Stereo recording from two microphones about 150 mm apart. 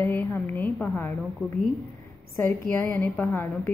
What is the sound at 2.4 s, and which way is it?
Speech, 15° left (ahead or behind).